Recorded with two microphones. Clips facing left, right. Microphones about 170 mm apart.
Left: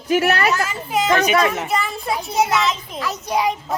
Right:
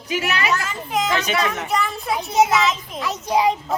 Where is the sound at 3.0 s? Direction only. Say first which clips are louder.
Right 2 dB; 25° right (ahead or behind).